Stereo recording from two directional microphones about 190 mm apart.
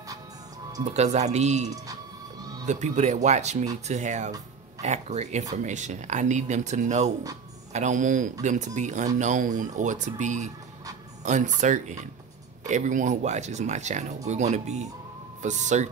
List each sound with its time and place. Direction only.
0.9 s speech: 35° right (ahead or behind)